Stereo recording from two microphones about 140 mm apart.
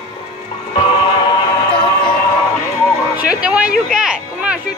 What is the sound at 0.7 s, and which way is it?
Music, 35° left (ahead or behind).